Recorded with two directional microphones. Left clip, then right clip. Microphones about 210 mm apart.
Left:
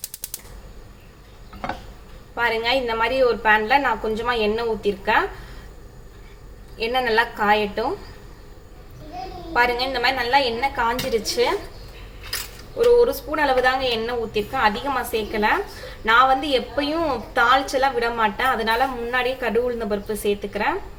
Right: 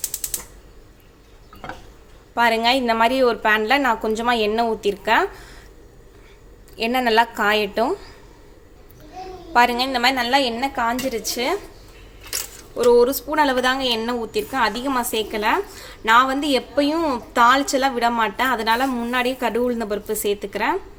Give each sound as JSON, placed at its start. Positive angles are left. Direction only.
{"t": 2.3, "sound": "a woman's voice", "side_deg": -50}
{"t": 6.7, "sound": "a woman's voice", "side_deg": -50}
{"t": 9.5, "sound": "a woman's voice", "side_deg": -45}
{"t": 12.7, "sound": "a woman's voice", "side_deg": -55}